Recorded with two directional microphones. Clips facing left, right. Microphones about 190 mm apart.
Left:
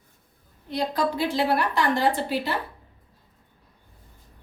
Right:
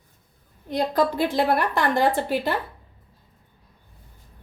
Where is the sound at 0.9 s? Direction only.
50° right (ahead or behind).